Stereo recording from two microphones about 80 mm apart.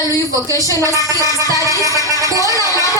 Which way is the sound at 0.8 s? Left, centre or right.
Right.